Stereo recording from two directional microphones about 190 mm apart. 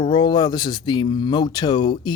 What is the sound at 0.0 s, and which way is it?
Speech, 25° left (ahead or behind).